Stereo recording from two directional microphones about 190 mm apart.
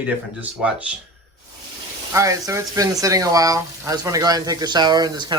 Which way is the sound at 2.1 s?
15° right (ahead or behind).